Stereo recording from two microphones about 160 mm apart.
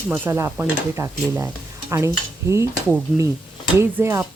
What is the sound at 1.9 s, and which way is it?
Stir, 15° right (ahead or behind).